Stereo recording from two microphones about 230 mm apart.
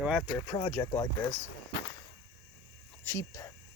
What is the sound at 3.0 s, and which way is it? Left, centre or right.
Speech, centre.